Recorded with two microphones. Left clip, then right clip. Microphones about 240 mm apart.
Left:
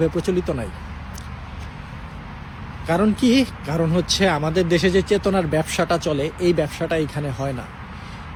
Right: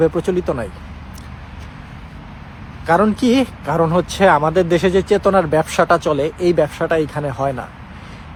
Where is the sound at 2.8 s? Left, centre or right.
Centre.